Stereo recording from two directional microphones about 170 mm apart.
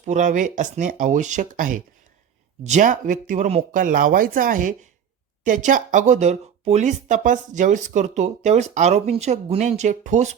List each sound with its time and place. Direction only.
0.0 s speech: 45° right (ahead or behind)